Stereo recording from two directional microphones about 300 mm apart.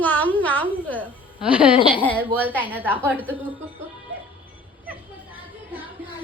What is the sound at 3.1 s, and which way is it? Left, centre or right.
Speech, centre.